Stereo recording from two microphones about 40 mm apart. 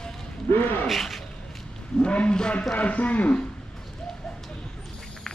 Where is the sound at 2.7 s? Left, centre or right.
Left.